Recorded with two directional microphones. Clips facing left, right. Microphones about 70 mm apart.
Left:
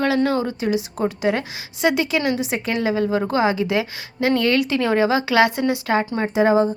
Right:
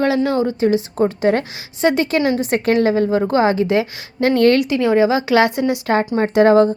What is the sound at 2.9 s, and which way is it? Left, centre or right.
A woman's voice, right.